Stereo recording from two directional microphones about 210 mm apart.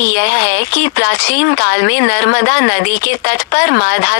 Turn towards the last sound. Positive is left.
turn(degrees=50)  # may be behind; listen again after turning